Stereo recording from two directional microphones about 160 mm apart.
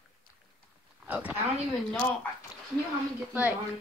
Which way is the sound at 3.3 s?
10° right (ahead or behind).